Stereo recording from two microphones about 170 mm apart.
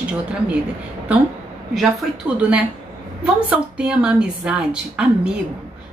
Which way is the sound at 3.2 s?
5° right (ahead or behind).